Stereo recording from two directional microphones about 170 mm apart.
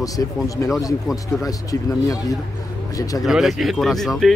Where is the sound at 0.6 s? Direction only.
15° left (ahead or behind).